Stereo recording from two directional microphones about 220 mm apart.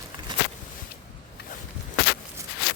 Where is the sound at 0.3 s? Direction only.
20° right (ahead or behind).